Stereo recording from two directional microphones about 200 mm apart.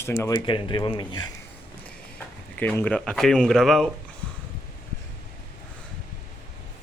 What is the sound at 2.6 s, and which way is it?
Speech, 10° left (ahead or behind).